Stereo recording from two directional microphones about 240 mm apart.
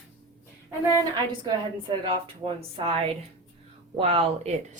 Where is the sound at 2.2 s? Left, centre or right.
Right.